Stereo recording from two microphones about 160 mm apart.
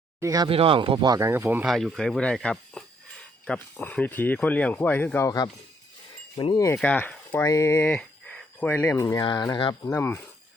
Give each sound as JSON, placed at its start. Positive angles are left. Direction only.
{"t": 0.2, "sound": "speech", "side_deg": -20}
{"t": 0.4, "sound": "speech", "side_deg": -35}
{"t": 1.6, "sound": "speech", "side_deg": 0}
{"t": 6.3, "sound": "wind chime", "side_deg": 35}
{"t": 6.7, "sound": "speech", "side_deg": 10}
{"t": 9.8, "sound": "speech", "side_deg": 15}